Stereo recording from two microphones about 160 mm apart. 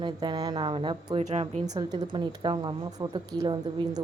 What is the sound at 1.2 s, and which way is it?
Speech, 45° right (ahead or behind).